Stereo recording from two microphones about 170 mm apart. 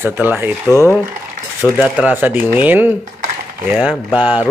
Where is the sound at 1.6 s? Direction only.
5° right (ahead or behind).